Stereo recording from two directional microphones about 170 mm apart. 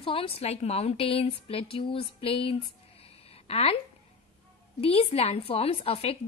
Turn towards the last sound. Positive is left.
turn(degrees=35)  # may be behind; listen again after turning